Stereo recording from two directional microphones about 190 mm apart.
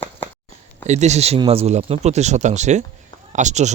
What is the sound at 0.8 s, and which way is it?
Speech, 35° right (ahead or behind).